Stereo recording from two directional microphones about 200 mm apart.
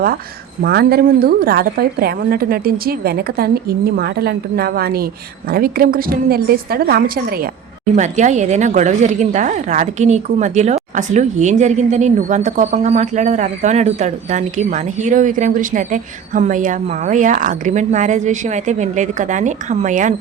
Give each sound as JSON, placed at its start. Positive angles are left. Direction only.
{"t": 0.6, "sound": "a woman's voice", "side_deg": -50}
{"t": 7.9, "sound": "speech", "side_deg": -35}